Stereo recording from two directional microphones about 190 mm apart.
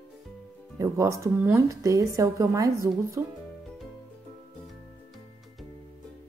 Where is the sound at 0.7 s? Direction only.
15° right (ahead or behind).